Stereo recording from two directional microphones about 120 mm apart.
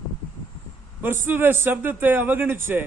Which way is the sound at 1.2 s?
15° right (ahead or behind).